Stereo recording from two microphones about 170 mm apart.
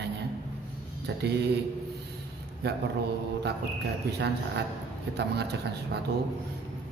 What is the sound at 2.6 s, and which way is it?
Speech, 75° right (ahead or behind).